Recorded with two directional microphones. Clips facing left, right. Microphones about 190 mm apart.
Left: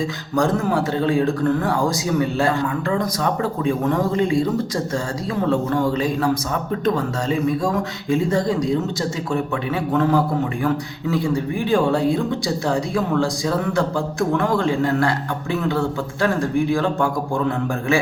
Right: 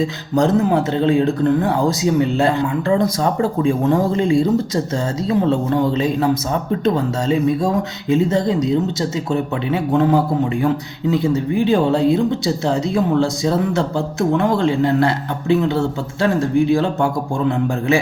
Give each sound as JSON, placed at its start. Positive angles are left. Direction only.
{"t": 0.0, "sound": "speech", "side_deg": -25}